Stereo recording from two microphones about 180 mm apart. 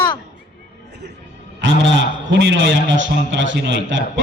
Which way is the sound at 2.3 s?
85° right.